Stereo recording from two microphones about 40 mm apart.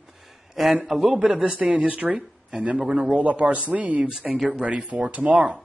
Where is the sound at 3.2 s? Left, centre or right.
Right.